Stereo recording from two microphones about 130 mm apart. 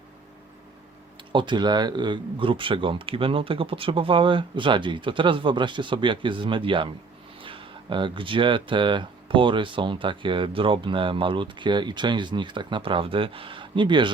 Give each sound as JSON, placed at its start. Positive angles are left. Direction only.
{"t": 1.3, "sound": "speech", "side_deg": -35}